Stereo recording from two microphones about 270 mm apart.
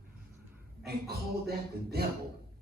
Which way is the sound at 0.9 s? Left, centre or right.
Right.